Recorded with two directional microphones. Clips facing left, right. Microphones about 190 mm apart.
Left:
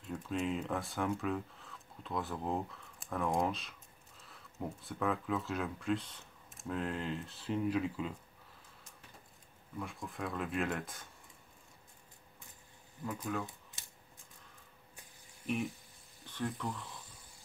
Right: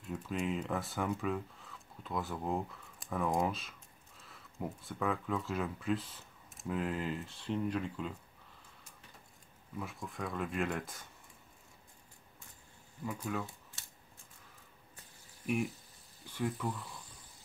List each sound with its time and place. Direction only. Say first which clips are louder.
0.1 s speech: even; centre (ahead or behind)
9.8 s speech: even; centre (ahead or behind)
13.0 s speech: even; centre (ahead or behind)
13.8 s mechanisms: even; 15° left (ahead or behind)
16.3 s speech: right 2 dB; 5° right (ahead or behind)